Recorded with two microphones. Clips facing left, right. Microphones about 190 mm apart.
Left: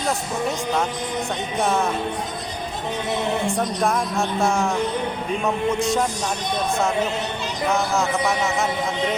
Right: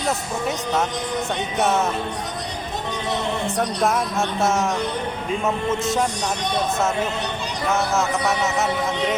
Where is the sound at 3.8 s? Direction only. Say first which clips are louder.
Right 1 dB; 5° right (ahead or behind).